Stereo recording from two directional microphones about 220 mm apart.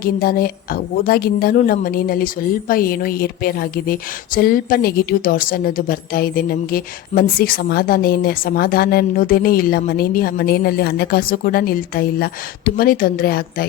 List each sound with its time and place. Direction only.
0.0 s a woman's voice: 40° left (ahead or behind)